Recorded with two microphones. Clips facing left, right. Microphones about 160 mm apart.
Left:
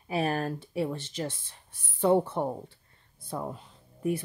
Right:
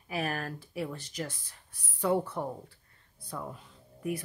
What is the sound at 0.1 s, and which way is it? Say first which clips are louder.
A woman's voice: left 5 dB; 30° left (ahead or behind).